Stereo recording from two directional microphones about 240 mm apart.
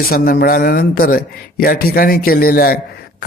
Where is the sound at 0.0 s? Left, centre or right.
Left.